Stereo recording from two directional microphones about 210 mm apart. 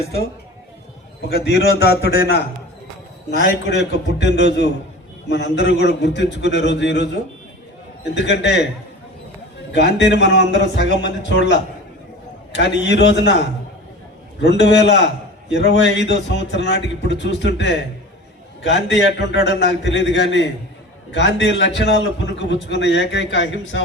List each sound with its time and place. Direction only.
1.5 s a man's voice: 50° left (ahead or behind)
8.2 s a man's voice: 55° left (ahead or behind)
9.7 s a man's voice: 55° left (ahead or behind)
14.4 s a man's voice: 55° left (ahead or behind)